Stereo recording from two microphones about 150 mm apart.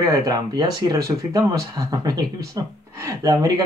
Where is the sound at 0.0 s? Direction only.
25° right (ahead or behind).